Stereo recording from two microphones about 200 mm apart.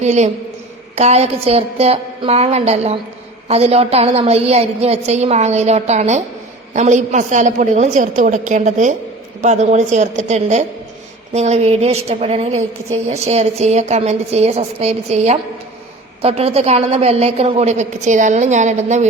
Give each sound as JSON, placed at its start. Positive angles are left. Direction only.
{"t": 0.0, "sound": "a woman's voice", "side_deg": -35}